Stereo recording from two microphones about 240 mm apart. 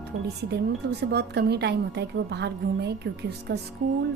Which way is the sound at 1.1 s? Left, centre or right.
Right.